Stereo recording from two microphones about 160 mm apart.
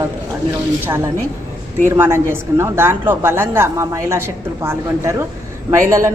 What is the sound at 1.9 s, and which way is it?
A woman's voice, 15° right (ahead or behind).